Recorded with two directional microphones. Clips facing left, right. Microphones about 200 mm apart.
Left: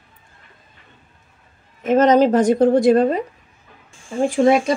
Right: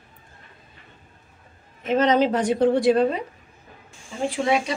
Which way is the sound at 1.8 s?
45° left (ahead or behind).